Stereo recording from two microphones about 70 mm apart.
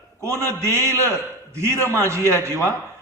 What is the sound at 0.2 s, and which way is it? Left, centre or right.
A man's voice, right.